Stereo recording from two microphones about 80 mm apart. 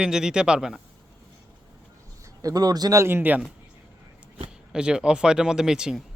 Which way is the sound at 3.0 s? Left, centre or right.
Right.